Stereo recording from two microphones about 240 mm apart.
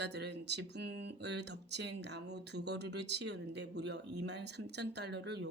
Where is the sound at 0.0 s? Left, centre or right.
Right.